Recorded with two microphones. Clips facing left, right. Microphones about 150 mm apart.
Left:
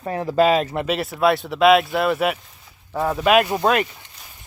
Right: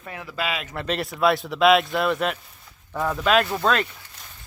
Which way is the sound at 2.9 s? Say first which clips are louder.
Left 3 dB; 25° left (ahead or behind).